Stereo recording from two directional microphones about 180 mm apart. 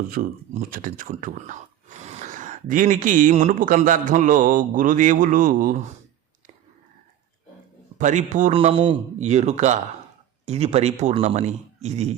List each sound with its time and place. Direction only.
0.1 s speech: 50° right (ahead or behind)
7.9 s speech: 45° right (ahead or behind)
8.5 s a man's voice: 30° right (ahead or behind)